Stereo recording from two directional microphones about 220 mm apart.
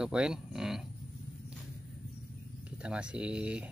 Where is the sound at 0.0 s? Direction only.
5° right (ahead or behind).